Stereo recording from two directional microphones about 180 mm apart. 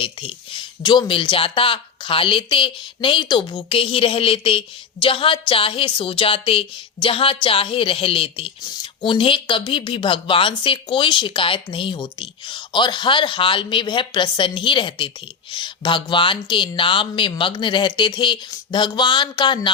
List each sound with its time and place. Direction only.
0.0 s speech: 30° left (ahead or behind)